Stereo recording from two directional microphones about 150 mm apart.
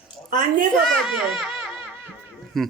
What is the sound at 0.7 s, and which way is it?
Speech, centre (ahead or behind).